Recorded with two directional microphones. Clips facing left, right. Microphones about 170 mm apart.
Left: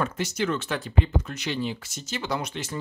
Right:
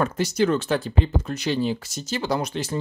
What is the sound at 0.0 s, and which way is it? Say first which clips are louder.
Speech: right 6 dB; 35° right (ahead or behind).